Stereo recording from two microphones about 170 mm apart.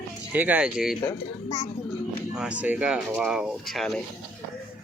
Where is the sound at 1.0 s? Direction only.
20° left (ahead or behind).